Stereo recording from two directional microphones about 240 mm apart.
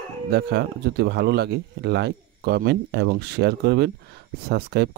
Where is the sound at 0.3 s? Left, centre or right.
Right.